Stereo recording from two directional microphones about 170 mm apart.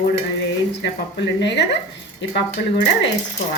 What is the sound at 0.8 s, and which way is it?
Speech, 90° left.